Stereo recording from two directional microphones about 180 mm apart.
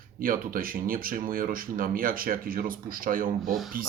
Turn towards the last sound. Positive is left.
turn(degrees=0)  # may be behind; listen again after turning